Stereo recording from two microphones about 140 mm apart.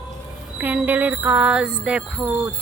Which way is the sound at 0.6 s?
10° right (ahead or behind).